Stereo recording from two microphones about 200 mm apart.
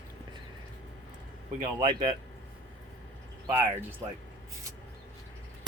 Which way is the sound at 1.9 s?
35° right (ahead or behind).